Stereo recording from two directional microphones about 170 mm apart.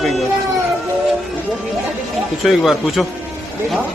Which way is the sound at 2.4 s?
Centre (ahead or behind).